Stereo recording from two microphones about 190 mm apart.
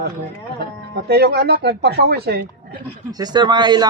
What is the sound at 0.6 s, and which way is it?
Speech, 60° right (ahead or behind).